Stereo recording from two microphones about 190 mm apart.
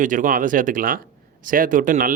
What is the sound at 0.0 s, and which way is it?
Speech, 45° right (ahead or behind).